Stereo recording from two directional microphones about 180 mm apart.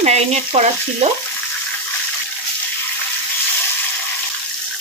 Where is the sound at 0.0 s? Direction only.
35° right (ahead or behind).